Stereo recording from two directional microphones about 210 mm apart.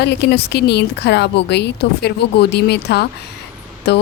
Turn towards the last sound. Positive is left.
turn(degrees=55)  # may be behind; listen again after turning